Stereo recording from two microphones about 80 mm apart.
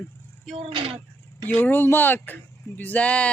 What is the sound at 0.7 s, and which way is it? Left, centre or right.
Speech, right.